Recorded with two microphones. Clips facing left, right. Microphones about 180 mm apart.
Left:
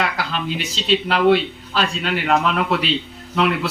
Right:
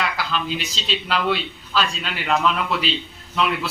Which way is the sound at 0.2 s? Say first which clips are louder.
Left 1 dB; 55° left (ahead or behind).